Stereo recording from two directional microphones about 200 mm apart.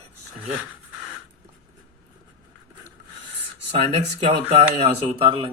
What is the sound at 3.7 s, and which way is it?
Speech, 30° right (ahead or behind).